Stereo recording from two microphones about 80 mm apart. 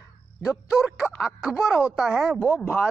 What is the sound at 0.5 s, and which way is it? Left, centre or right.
A man's voice, centre.